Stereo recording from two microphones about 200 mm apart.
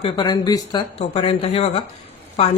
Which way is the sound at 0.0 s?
20° left (ahead or behind).